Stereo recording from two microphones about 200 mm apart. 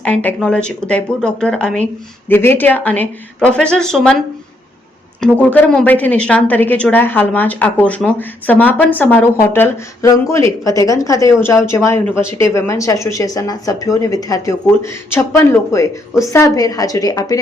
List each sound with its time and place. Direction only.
0.0 s a woman's voice: 5° left (ahead or behind)
5.2 s a woman's voice: 5° left (ahead or behind)